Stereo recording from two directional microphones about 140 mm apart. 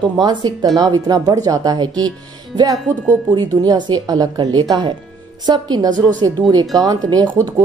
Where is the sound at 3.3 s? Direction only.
30° right (ahead or behind).